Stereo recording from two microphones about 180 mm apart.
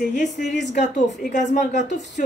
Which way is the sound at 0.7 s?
40° left (ahead or behind).